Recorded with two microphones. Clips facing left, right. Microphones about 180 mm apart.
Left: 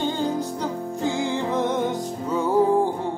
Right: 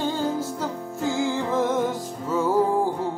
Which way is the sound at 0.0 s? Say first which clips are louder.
Left 1 dB; centre (ahead or behind).